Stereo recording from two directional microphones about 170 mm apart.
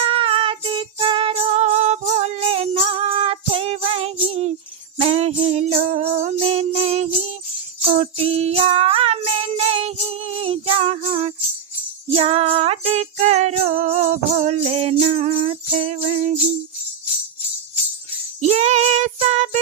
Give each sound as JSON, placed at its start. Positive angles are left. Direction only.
{"t": 0.0, "sound": "music", "side_deg": -35}
{"t": 18.3, "sound": "child singing", "side_deg": -40}